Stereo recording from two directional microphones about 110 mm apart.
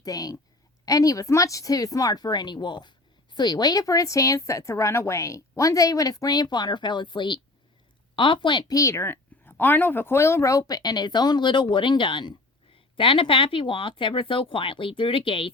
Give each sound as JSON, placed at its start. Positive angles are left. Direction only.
{"t": 0.0, "sound": "a woman's voice", "side_deg": 35}